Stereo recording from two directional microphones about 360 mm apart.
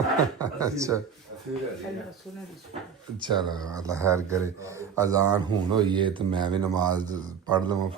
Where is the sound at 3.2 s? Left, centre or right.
Centre.